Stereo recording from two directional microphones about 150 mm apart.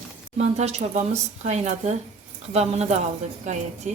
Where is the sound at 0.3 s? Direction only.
45° right (ahead or behind).